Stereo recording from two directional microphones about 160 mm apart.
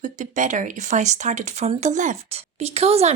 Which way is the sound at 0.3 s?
55° right (ahead or behind).